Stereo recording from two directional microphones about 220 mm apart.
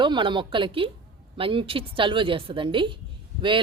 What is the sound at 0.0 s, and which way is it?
Speech, 20° right (ahead or behind).